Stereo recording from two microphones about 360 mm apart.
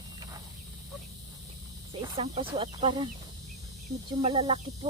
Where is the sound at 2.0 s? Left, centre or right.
Centre.